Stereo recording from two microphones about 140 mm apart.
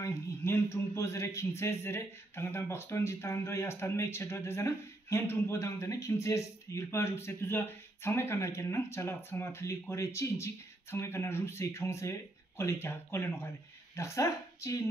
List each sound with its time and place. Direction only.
0.0 s speech: 20° left (ahead or behind)